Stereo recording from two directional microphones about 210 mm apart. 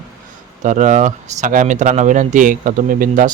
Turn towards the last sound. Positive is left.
turn(degrees=-40)  # may be behind; listen again after turning